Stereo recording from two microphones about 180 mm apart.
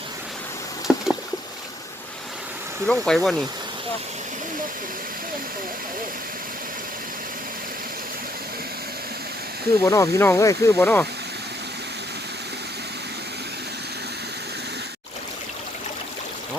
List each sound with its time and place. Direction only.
0.9 s rowboat: 5° right (ahead or behind)
2.8 s speech: 5° left (ahead or behind)
9.8 s speech: 15° left (ahead or behind)